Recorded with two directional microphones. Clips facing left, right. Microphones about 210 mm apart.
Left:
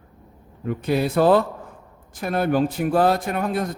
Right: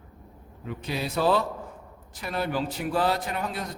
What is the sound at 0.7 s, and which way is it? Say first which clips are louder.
Speech: left 10 dB; 55° left (ahead or behind).